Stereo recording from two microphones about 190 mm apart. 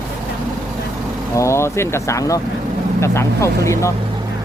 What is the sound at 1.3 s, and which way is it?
Speech, 15° left (ahead or behind).